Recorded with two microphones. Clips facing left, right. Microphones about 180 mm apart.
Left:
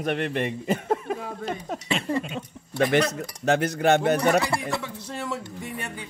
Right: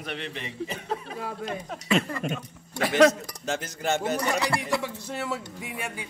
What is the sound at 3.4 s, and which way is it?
Speech, 65° left (ahead or behind).